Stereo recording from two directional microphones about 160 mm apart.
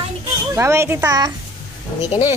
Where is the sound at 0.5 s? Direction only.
15° right (ahead or behind).